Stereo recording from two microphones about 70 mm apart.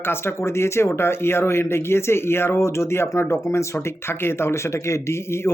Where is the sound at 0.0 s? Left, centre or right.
Left.